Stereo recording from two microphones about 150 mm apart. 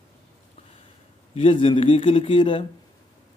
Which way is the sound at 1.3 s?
40° left (ahead or behind).